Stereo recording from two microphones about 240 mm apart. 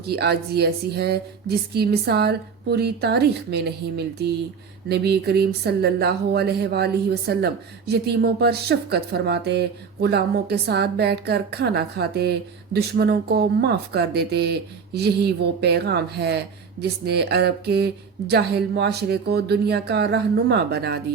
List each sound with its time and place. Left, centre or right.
0.0 s a woman's voice: right